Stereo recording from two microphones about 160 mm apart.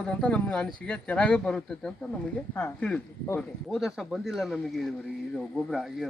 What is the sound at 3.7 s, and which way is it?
Speech, centre (ahead or behind).